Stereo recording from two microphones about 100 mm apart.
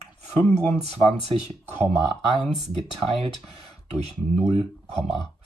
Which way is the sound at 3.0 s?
85° right.